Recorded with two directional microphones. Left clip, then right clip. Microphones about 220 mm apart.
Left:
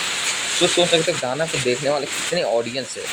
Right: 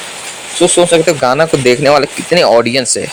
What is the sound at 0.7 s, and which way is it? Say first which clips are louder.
Speech: right 11 dB; 45° right (ahead or behind).